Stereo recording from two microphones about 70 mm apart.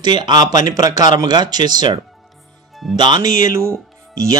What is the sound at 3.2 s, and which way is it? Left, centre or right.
Speech, right.